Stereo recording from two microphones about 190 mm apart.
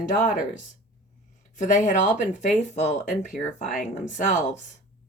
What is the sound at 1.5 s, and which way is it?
Speech, 40° left (ahead or behind).